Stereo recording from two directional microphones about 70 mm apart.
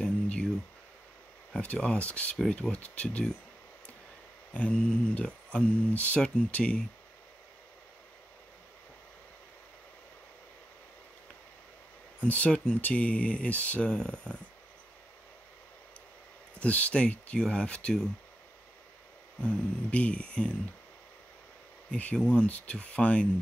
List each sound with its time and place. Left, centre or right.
0.0 s a sound: centre
1.5 s speech: centre
4.6 s speech: centre
12.2 s speech: centre
16.5 s speech: centre
19.4 s speech: centre
21.9 s speech: centre